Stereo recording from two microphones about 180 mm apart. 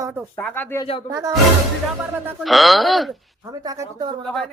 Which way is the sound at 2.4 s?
Centre (ahead or behind).